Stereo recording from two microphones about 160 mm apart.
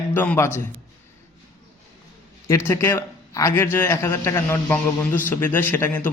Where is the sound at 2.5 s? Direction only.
15° left (ahead or behind).